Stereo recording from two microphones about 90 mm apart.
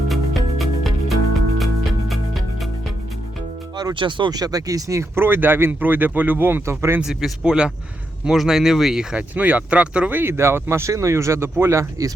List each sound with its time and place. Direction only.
0.1 s music: centre (ahead or behind)
3.9 s speech: 60° right (ahead or behind); by 7.0 s 30° right (ahead or behind)
7.0 s speech: centre (ahead or behind)
10.2 s speech: 30° right (ahead or behind)